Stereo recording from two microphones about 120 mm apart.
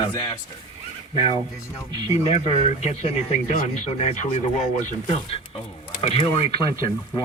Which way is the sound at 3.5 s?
85° left.